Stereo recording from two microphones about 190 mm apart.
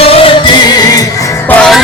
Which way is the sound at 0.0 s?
30° left (ahead or behind).